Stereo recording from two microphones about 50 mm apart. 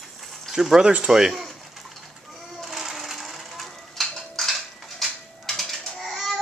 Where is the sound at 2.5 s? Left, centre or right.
Centre.